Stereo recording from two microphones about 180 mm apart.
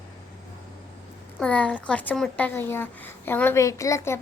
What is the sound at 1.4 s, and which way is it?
A woman's voice, 5° left (ahead or behind).